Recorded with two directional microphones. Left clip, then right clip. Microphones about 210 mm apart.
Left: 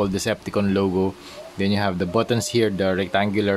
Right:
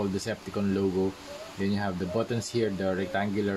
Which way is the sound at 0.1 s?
40° left (ahead or behind).